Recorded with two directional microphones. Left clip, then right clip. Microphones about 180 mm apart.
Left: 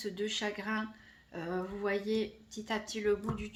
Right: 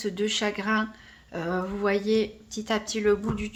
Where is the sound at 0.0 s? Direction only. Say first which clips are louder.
Right 8 dB; 30° right (ahead or behind).